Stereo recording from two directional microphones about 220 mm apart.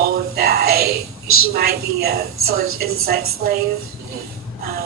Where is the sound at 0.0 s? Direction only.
45° right (ahead or behind).